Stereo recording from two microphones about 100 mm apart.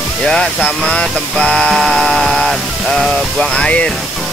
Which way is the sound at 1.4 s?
10° left (ahead or behind).